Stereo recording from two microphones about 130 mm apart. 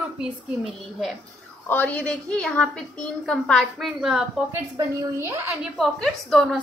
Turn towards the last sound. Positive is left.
turn(degrees=0)  # may be behind; listen again after turning